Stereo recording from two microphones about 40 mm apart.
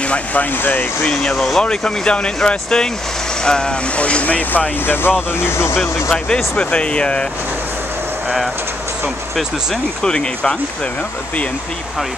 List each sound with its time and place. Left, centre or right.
0.1 s speech: left
0.6 s speech: left
1.3 s speech: centre
1.6 s speech: left
3.9 s speech: left
4.5 s speech: left
5.4 s speech: left
5.8 s speech: centre
10.0 s speech: left